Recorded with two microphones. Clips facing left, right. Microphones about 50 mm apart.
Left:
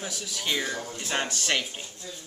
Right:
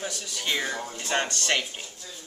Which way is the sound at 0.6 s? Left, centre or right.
Right.